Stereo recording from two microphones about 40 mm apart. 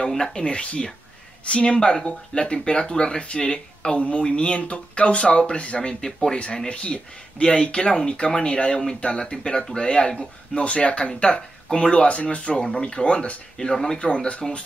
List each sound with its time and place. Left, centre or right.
0.1 s speech: centre; by 12.5 s left
12.5 s speech: left
13.6 s speech: centre
13.9 s speech: left